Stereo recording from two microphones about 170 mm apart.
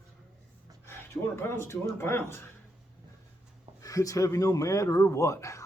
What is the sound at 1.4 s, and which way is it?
Speech, 15° left (ahead or behind).